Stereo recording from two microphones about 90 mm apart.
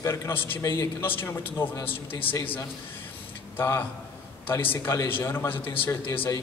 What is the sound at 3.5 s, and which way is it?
A man's voice, 25° left (ahead or behind).